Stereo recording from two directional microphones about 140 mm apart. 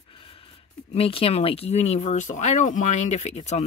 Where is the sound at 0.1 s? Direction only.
40° left (ahead or behind).